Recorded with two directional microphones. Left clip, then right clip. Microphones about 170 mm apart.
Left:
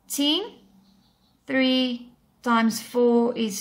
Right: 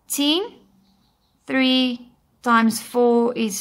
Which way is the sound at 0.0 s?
30° right (ahead or behind).